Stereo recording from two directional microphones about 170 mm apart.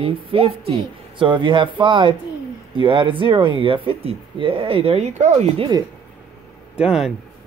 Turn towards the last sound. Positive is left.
turn(degrees=-5)  # may be behind; listen again after turning